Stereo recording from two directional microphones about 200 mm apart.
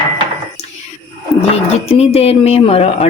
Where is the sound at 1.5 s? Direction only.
30° left (ahead or behind).